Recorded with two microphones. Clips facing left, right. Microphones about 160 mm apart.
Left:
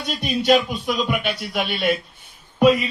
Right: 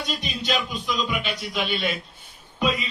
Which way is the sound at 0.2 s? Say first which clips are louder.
Left 14 dB; 55° left (ahead or behind).